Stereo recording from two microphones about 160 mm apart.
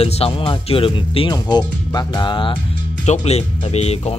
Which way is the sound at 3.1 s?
40° left (ahead or behind).